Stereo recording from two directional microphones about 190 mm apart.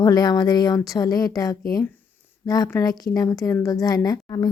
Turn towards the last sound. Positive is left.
turn(degrees=20)  # may be behind; listen again after turning